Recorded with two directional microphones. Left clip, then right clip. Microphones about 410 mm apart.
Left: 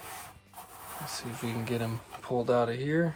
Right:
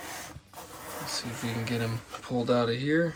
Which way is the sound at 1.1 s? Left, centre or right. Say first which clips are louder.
Right 3 dB; centre.